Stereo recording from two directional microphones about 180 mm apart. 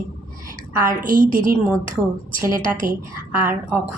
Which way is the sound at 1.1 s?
50° right (ahead or behind).